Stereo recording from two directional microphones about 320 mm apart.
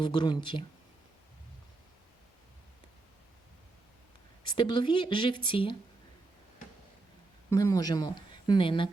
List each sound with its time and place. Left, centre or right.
0.0 s speech: centre
4.5 s speech: centre
7.5 s speech: centre